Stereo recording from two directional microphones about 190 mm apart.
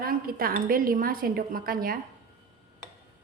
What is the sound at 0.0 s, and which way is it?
Speech, 50° right (ahead or behind).